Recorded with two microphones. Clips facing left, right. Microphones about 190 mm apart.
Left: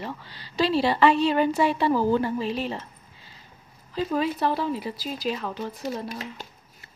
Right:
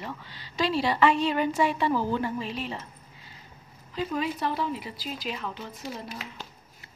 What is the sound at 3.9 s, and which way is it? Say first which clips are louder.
A woman's voice: left 4 dB; 35° left (ahead or behind).